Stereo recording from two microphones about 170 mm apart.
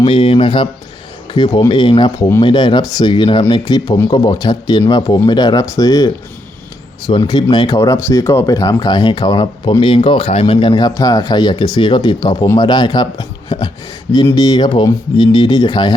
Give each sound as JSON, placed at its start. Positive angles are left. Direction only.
{"t": 0.0, "sound": "speech", "side_deg": 35}
{"t": 7.1, "sound": "speech", "side_deg": 25}